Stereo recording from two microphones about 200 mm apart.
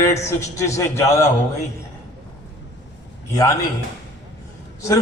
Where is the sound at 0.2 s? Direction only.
15° left (ahead or behind).